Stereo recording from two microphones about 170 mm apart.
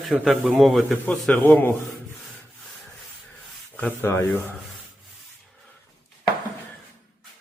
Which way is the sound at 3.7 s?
10° left (ahead or behind).